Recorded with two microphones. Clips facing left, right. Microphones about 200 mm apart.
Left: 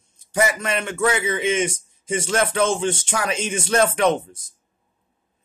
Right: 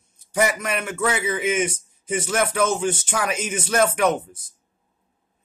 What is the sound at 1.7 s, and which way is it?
Speech, 25° left (ahead or behind).